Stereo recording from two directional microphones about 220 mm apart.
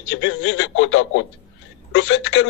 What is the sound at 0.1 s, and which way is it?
A man's voice, 60° left (ahead or behind).